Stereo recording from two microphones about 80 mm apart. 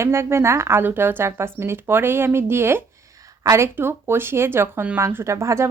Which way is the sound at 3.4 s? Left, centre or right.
Right.